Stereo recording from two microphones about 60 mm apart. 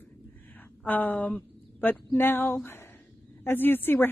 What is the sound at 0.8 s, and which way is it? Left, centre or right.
A woman's voice, left.